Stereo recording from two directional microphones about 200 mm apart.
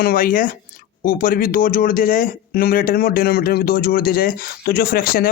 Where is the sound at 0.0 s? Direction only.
45° left (ahead or behind).